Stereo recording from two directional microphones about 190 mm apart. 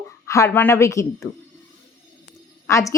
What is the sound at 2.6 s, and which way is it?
Speech, 15° left (ahead or behind).